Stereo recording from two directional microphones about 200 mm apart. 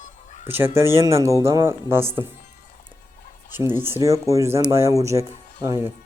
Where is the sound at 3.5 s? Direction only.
10° right (ahead or behind).